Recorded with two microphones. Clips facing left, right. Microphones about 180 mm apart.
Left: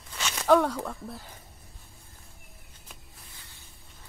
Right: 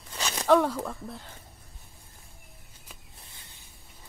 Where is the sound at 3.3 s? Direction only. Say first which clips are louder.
Left 1 dB; 25° right (ahead or behind).